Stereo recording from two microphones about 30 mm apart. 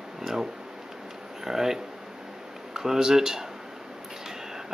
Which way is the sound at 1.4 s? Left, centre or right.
Centre.